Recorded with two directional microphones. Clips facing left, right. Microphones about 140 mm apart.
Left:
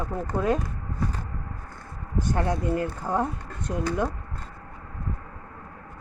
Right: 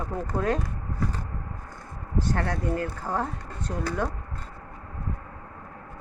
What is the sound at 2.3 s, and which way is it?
Speech, 15° left (ahead or behind).